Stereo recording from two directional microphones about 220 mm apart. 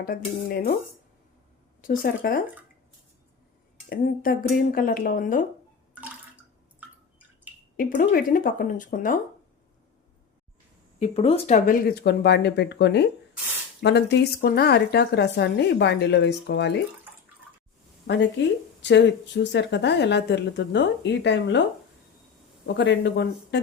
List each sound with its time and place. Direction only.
0.0 s speech: 40° left (ahead or behind)
1.8 s speech: 40° left (ahead or behind)
3.8 s speech: 40° left (ahead or behind)
5.9 s bathtub: 5° right (ahead or behind)
6.7 s drip: 5° right (ahead or behind)
7.8 s speech: 40° left (ahead or behind)
11.0 s speech: 25° left (ahead or behind); by 16.8 s 50° left (ahead or behind)
18.0 s speech: 55° left (ahead or behind)
22.6 s speech: 50° left (ahead or behind)